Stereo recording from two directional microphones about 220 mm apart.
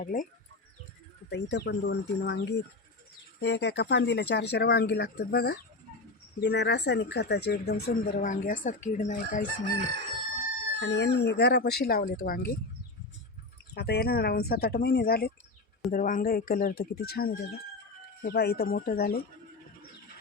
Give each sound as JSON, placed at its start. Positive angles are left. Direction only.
{"t": 0.0, "sound": "speech", "side_deg": 35}
{"t": 1.3, "sound": "speech", "side_deg": 50}
{"t": 10.8, "sound": "speech", "side_deg": 50}
{"t": 13.7, "sound": "speech", "side_deg": 45}